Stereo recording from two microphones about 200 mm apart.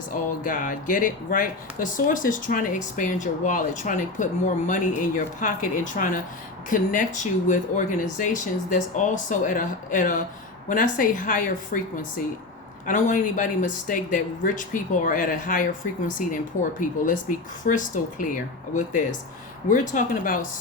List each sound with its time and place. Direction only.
0.1 s speech: 40° left (ahead or behind)
12.8 s speech: 40° left (ahead or behind)